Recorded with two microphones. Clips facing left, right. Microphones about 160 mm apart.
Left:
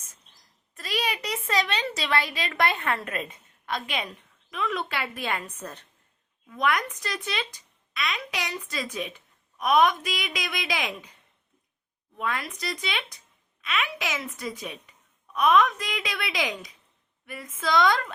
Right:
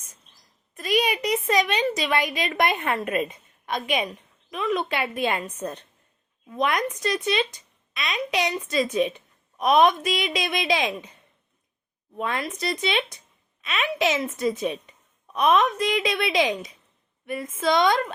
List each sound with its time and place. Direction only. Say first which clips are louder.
0.7 s a woman's voice: right 7 dB; 15° right (ahead or behind)
12.1 s speech: right 3 dB; 25° right (ahead or behind)